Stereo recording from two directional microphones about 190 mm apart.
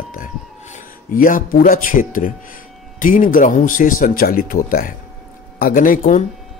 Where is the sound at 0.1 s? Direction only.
45° left (ahead or behind).